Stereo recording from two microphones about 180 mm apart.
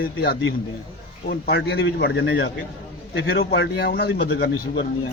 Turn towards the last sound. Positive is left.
turn(degrees=65)  # may be behind; listen again after turning